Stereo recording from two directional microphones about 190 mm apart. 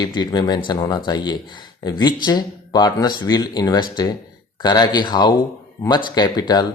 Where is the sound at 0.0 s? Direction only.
20° left (ahead or behind).